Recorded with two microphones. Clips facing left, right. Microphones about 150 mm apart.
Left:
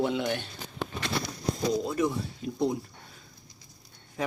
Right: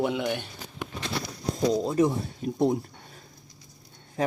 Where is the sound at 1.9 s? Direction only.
35° right (ahead or behind).